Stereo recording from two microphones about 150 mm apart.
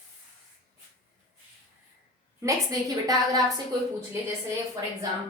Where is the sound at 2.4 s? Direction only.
25° right (ahead or behind).